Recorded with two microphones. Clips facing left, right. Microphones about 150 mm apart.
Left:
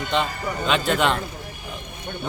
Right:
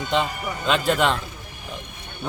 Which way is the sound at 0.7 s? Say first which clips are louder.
Right 1 dB; centre (ahead or behind).